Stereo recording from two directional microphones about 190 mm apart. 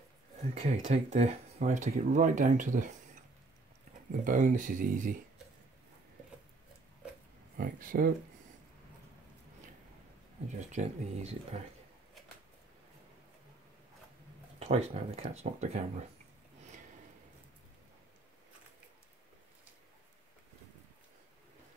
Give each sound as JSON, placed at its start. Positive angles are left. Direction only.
{"t": 0.6, "sound": "speech", "side_deg": -35}
{"t": 4.1, "sound": "speech", "side_deg": -45}
{"t": 7.5, "sound": "speech", "side_deg": -45}
{"t": 10.7, "sound": "speech", "side_deg": -35}
{"t": 14.6, "sound": "speech", "side_deg": -35}